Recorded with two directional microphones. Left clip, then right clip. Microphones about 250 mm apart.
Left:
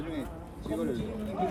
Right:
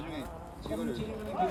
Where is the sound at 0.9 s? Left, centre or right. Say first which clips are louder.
Right 1 dB; right.